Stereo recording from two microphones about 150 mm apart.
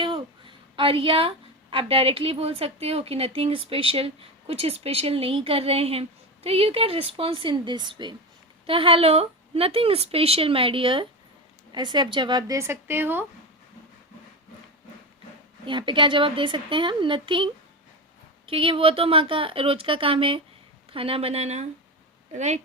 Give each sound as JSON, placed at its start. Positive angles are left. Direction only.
{"t": 0.0, "sound": "a sound", "side_deg": -35}
{"t": 1.7, "sound": "a woman's voice", "side_deg": -35}
{"t": 15.6, "sound": "a woman's voice", "side_deg": -30}